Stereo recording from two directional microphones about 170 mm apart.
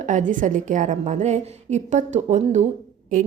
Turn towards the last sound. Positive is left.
turn(degrees=-50)  # may be behind; listen again after turning